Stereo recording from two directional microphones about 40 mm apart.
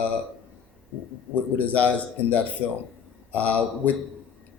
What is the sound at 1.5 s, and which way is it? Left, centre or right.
Speech, left.